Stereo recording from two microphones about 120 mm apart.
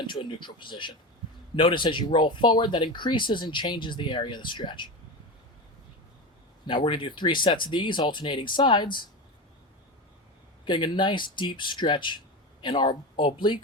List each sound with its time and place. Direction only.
0.1 s speech: 40° left (ahead or behind)
6.7 s speech: 40° left (ahead or behind)
10.7 s speech: 40° left (ahead or behind)